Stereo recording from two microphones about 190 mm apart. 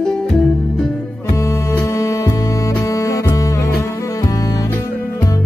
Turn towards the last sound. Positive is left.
turn(degrees=15)  # may be behind; listen again after turning